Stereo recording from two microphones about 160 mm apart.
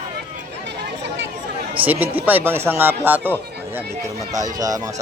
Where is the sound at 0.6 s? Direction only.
90° right.